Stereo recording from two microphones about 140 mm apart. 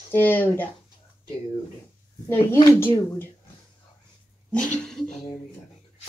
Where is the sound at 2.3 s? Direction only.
15° left (ahead or behind).